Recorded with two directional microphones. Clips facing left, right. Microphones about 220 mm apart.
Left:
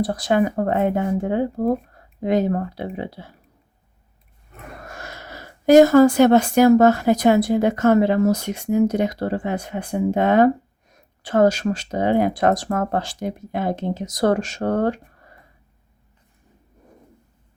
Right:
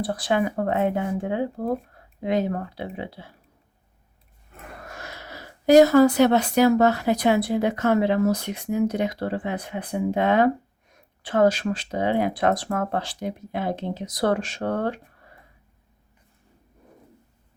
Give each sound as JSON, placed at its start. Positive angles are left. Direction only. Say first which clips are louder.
{"t": 0.0, "sound": "speech", "louder": "left 4 dB", "side_deg": 45}
{"t": 4.9, "sound": "speech", "louder": "left 2 dB", "side_deg": 45}